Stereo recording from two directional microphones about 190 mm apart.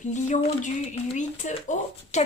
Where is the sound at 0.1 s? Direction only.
40° left (ahead or behind).